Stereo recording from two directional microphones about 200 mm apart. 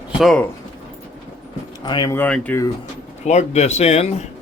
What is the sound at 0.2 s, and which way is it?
Speech, centre (ahead or behind).